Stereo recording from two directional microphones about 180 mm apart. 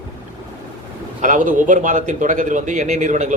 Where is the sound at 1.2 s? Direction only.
45° right (ahead or behind).